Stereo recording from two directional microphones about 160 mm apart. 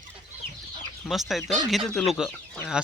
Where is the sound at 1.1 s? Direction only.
Centre (ahead or behind).